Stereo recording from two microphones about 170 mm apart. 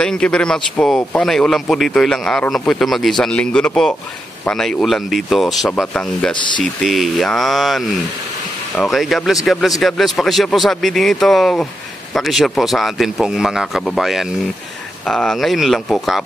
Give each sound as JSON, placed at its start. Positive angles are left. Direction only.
{"t": 0.0, "sound": "speech", "side_deg": 5}
{"t": 6.3, "sound": "speech", "side_deg": 25}
{"t": 6.6, "sound": "speech", "side_deg": 0}